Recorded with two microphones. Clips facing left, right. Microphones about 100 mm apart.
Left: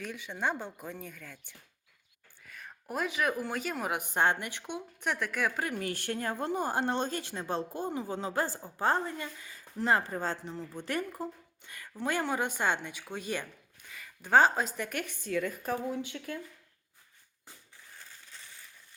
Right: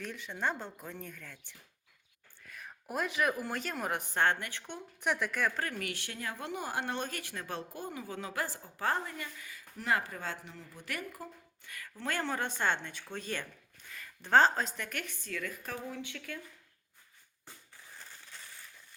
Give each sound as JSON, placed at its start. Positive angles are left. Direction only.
{"t": 0.0, "sound": "a woman's voice", "side_deg": 5}
{"t": 4.0, "sound": "a woman's voice", "side_deg": 15}
{"t": 4.9, "sound": "speech", "side_deg": 0}
{"t": 5.9, "sound": "a woman's voice", "side_deg": 45}
{"t": 15.3, "sound": "speech", "side_deg": 25}